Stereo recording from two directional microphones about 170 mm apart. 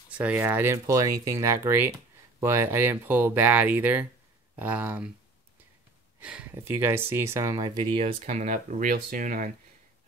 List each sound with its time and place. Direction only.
0.1 s speech: 10° right (ahead or behind)
6.2 s speech: 10° right (ahead or behind)
8.0 s speech: 40° right (ahead or behind)